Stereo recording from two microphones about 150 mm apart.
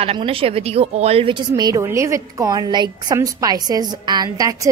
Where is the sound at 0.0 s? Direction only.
40° right (ahead or behind).